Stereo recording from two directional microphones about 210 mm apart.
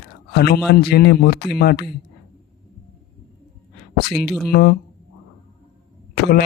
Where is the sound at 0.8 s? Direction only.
50° left (ahead or behind).